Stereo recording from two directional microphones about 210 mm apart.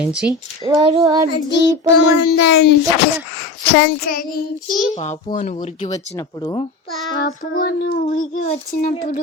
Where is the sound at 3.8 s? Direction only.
45° left (ahead or behind).